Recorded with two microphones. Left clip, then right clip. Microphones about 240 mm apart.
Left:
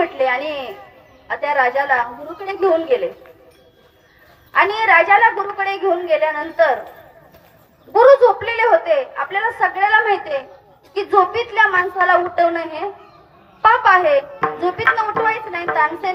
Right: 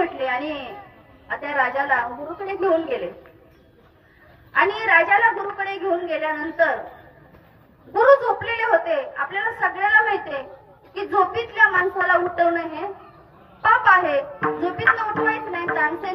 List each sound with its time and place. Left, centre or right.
0.2 s a sound: left
1.3 s speech: left
4.6 s speech: left
7.9 s speech: left